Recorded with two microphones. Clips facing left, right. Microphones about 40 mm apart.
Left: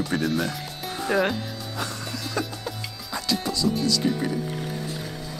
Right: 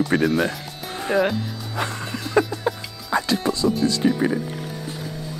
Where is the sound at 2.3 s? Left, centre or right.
Right.